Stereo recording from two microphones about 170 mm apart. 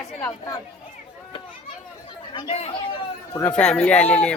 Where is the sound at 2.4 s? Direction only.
40° left (ahead or behind).